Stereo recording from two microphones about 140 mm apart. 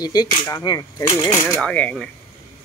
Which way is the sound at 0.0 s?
25° left (ahead or behind).